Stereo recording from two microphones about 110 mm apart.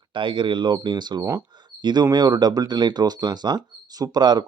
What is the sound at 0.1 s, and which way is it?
Speech, 50° right (ahead or behind).